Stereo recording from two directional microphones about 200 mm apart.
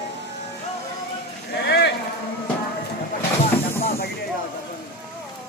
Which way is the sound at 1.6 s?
55° left (ahead or behind).